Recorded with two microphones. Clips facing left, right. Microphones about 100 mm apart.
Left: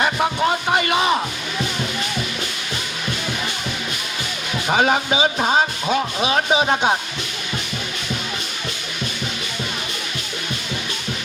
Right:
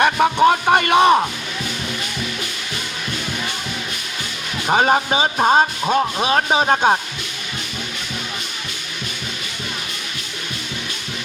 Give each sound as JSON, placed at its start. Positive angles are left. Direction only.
{"t": 0.0, "sound": "speech", "side_deg": -55}
{"t": 4.7, "sound": "speech", "side_deg": -30}